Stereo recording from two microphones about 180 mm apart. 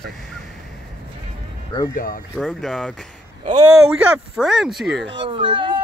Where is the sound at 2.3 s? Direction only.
Centre (ahead or behind).